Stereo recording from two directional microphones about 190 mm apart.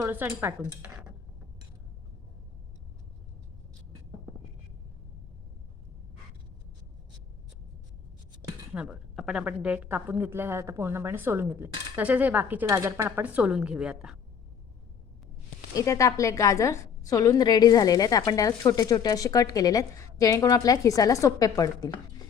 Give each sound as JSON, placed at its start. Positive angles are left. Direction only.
{"t": 0.0, "sound": "a woman's voice", "side_deg": -15}
{"t": 8.7, "sound": "a woman's voice", "side_deg": -5}
{"t": 15.7, "sound": "speech", "side_deg": 15}